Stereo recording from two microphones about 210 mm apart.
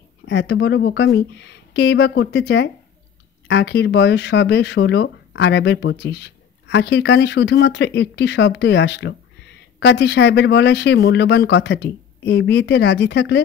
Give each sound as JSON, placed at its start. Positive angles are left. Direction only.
{"t": 0.3, "sound": "speech", "side_deg": 55}